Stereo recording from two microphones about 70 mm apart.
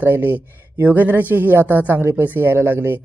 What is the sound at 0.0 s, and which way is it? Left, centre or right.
Speech, right.